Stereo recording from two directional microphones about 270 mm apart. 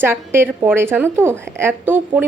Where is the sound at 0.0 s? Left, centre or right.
Centre.